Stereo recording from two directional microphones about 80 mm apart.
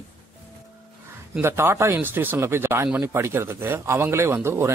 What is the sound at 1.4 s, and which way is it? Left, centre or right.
Speech, right.